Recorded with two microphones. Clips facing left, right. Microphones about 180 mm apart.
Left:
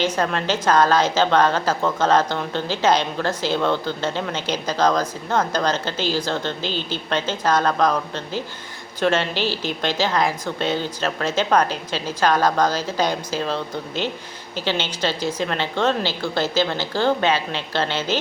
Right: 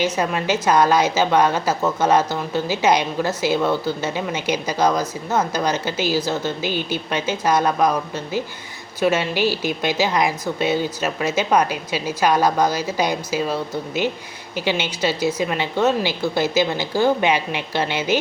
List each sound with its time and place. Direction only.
0.0 s a woman's voice: 10° right (ahead or behind)